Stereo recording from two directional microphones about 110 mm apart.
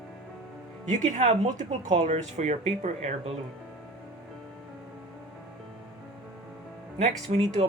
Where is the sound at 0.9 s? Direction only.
90° right.